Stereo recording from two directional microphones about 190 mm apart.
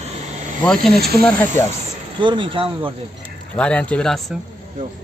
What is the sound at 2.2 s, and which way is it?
Speech, 25° right (ahead or behind).